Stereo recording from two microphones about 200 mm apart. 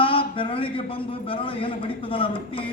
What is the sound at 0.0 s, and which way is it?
A man's voice, 25° left (ahead or behind).